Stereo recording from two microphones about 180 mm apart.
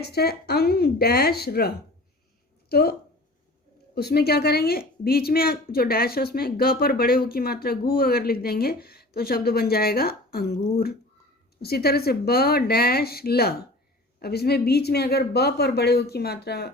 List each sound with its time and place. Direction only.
0.0 s speech: 60° left (ahead or behind)
3.9 s speech: 60° left (ahead or behind)